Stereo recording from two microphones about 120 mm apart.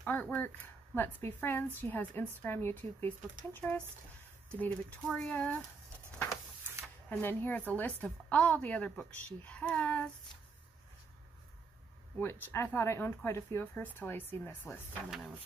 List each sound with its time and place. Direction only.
0.0 s a woman's voice: 15° left (ahead or behind)
7.1 s a woman's voice: 15° left (ahead or behind)
12.2 s a woman's voice: 20° left (ahead or behind)
15.0 s speech: 5° right (ahead or behind)